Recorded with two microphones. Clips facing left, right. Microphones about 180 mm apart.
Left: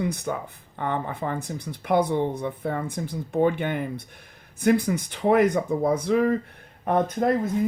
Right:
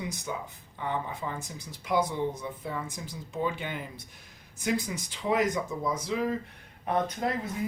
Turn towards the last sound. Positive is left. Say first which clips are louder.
# left 8 dB
turn(degrees=50)  # may be behind; listen again after turning